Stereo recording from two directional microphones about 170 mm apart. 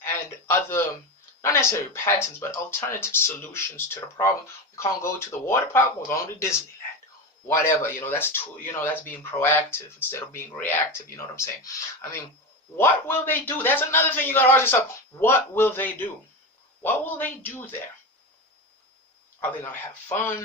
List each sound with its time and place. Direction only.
0.0 s a man's voice: 15° left (ahead or behind)
12.7 s speech: 15° left (ahead or behind)
19.4 s speech: 10° left (ahead or behind)